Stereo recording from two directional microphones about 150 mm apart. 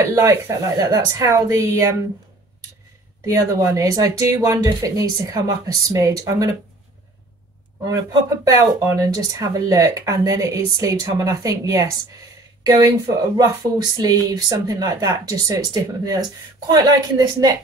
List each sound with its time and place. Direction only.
0.1 s speech: 20° right (ahead or behind)
3.3 s speech: 25° right (ahead or behind)
8.5 s speech: 25° right (ahead or behind)